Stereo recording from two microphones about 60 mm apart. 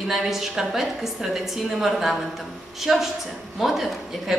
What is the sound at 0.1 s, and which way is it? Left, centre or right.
A woman's voice, centre.